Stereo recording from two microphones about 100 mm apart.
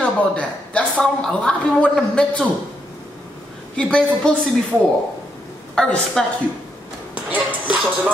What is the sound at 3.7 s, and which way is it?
Speech, 10° left (ahead or behind).